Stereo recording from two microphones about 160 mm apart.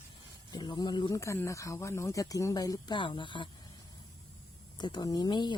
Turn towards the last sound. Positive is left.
turn(degrees=30)  # may be behind; listen again after turning